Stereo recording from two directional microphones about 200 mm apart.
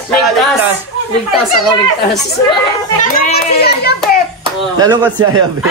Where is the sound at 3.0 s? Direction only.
50° left (ahead or behind).